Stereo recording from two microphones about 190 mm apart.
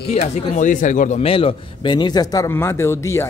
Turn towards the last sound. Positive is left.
turn(degrees=15)  # may be behind; listen again after turning